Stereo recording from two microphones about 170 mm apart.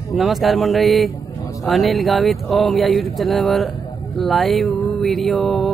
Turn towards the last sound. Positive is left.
turn(degrees=0)  # may be behind; listen again after turning